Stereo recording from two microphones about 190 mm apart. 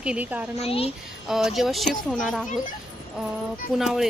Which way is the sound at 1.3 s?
Centre (ahead or behind).